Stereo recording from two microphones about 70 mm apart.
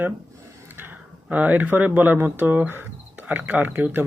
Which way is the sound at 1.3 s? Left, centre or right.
Right.